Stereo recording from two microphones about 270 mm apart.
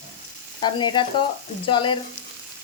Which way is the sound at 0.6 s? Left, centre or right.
Centre.